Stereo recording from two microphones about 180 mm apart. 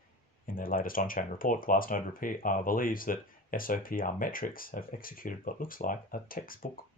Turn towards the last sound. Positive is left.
turn(degrees=50)  # may be behind; listen again after turning